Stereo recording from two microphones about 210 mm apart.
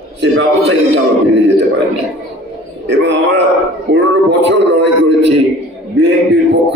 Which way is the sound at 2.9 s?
60° right (ahead or behind).